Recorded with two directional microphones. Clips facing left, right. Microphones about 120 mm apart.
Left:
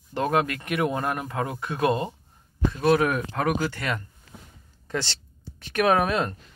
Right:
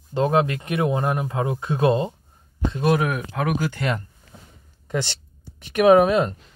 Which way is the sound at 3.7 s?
25° right (ahead or behind).